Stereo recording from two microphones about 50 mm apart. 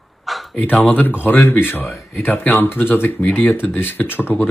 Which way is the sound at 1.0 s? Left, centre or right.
Left.